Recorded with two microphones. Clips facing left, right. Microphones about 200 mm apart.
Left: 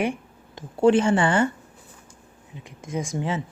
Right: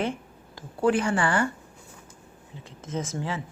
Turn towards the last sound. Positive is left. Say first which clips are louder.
# left 3 dB
turn(degrees=20)  # may be behind; listen again after turning